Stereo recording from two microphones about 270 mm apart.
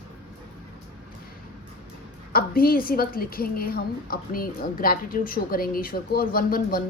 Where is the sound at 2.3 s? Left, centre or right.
Left.